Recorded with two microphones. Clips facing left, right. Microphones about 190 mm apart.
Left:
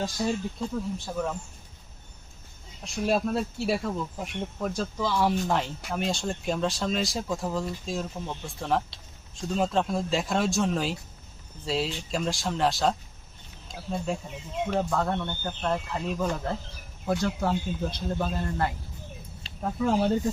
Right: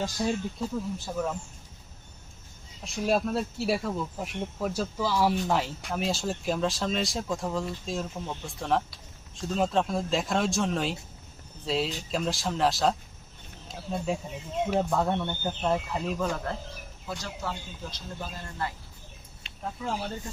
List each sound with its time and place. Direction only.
0.0 s speech: 5° right (ahead or behind)
2.8 s speech: centre (ahead or behind)
17.1 s speech: 55° left (ahead or behind)
19.8 s speech: 55° left (ahead or behind)